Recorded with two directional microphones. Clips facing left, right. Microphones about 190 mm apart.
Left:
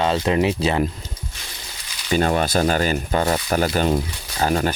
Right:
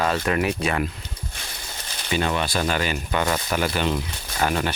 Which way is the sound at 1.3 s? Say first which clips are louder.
Right 2 dB; 55° right (ahead or behind).